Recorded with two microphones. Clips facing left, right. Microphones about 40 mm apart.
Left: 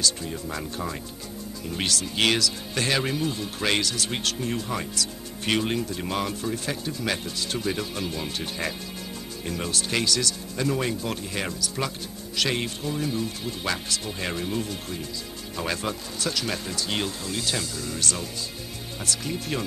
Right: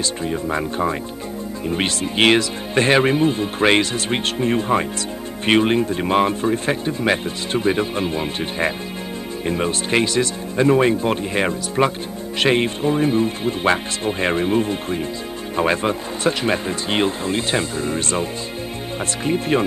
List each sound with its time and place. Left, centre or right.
0.0 s speech: right
19.2 s speech: right